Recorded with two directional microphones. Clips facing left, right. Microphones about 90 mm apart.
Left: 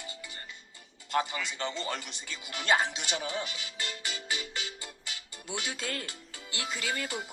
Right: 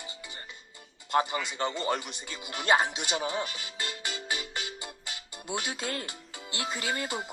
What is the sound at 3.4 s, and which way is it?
Speech, 40° right (ahead or behind).